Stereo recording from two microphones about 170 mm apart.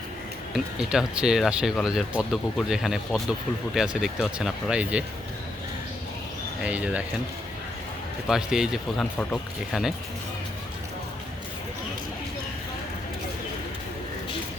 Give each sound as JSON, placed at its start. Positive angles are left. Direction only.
{"t": 0.5, "sound": "speech", "side_deg": -5}
{"t": 6.6, "sound": "speech", "side_deg": -5}
{"t": 8.3, "sound": "speech", "side_deg": -5}